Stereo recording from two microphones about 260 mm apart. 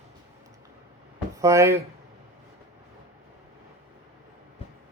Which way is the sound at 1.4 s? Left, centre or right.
Centre.